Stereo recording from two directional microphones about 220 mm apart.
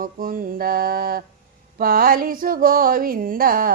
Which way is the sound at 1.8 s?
45° right (ahead or behind).